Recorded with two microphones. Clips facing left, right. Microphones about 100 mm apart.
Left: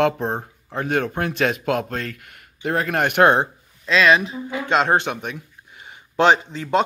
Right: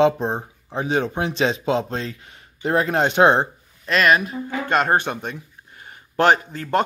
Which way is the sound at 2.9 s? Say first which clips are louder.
Even; 20° right (ahead or behind).